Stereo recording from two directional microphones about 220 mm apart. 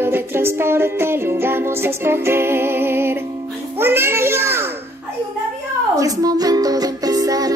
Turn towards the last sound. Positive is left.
turn(degrees=-15)  # may be behind; listen again after turning